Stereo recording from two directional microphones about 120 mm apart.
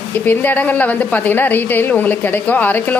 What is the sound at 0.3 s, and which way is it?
A woman's voice, 15° left (ahead or behind).